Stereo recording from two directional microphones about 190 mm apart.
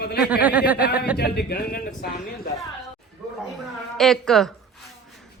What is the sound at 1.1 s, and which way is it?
A man's voice, 55° left (ahead or behind).